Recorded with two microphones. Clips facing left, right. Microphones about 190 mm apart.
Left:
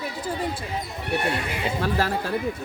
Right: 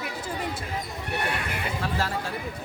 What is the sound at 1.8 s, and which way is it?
Speech, 60° left (ahead or behind).